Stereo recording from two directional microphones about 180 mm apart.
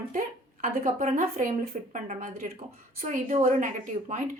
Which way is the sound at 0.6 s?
40° right (ahead or behind).